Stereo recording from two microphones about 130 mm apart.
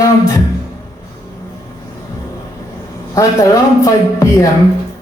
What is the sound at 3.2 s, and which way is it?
A man's voice, 25° left (ahead or behind).